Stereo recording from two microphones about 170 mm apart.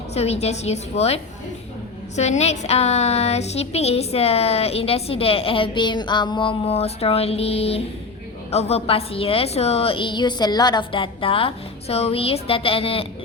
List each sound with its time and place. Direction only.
0.1 s a woman's voice: 40° left (ahead or behind)